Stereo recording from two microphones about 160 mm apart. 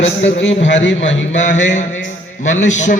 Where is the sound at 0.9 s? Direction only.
50° left (ahead or behind).